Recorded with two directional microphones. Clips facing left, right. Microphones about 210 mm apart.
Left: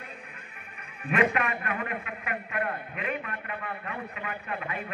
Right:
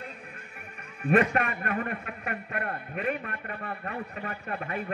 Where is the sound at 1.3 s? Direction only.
45° right (ahead or behind).